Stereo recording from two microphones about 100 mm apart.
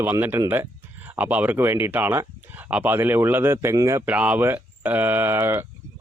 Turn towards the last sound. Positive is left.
turn(degrees=-20)  # may be behind; listen again after turning